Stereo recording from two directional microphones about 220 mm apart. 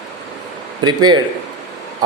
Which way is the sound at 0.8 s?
20° right (ahead or behind).